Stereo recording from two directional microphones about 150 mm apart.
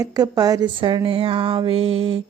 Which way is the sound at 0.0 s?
25° right (ahead or behind).